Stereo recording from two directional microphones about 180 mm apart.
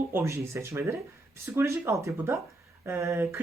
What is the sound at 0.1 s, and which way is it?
Speech, 15° right (ahead or behind).